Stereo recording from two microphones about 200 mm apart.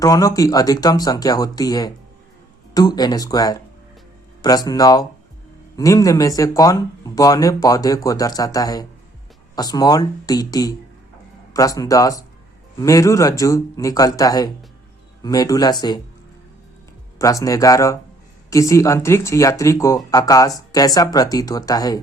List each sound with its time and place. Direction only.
0.0 s speech: 15° left (ahead or behind)
17.2 s speech: 15° left (ahead or behind)